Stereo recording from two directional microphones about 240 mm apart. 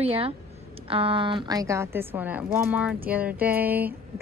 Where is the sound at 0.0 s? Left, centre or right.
Right.